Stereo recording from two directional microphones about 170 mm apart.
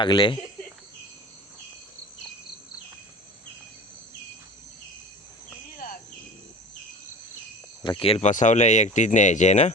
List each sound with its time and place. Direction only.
0.0 s speech: 25° left (ahead or behind)
5.7 s cricket: 55° left (ahead or behind)
7.9 s speech: 30° left (ahead or behind)
8.3 s speech: 45° left (ahead or behind)